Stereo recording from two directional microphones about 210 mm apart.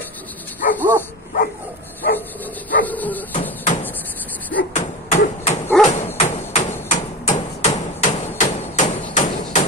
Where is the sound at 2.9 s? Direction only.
10° left (ahead or behind).